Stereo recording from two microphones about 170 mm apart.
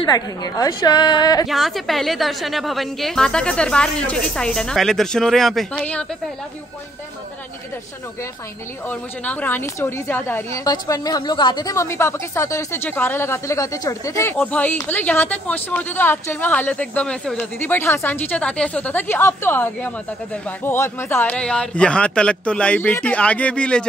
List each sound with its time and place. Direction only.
0.0 s a woman's voice: 20° left (ahead or behind)
1.5 s a woman's voice: centre (ahead or behind)
8.8 s a woman's voice: 10° left (ahead or behind)